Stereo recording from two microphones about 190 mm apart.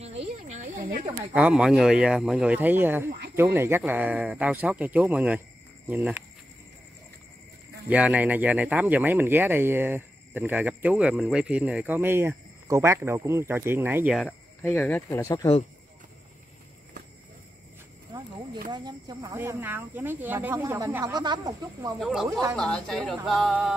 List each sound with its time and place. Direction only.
0.0 s a sound: 35° right (ahead or behind)
1.3 s speech: 5° right (ahead or behind)
7.9 s speech: 5° right (ahead or behind)
14.1 s speech: 5° left (ahead or behind)
18.1 s a sound: 20° right (ahead or behind)
18.7 s speech: 20° right (ahead or behind)
22.0 s speech: centre (ahead or behind)